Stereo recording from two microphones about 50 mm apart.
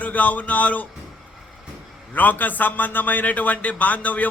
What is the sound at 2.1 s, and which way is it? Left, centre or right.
A man's voice, left.